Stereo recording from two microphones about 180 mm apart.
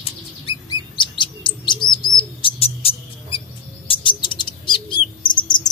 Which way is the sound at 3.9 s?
25° left (ahead or behind).